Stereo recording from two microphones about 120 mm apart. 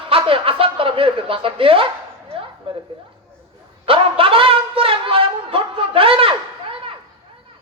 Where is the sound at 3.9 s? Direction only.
50° right (ahead or behind).